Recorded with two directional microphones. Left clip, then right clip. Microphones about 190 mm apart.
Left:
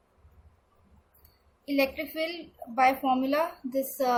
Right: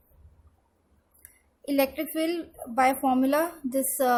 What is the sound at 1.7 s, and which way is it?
A woman's voice, 45° right (ahead or behind).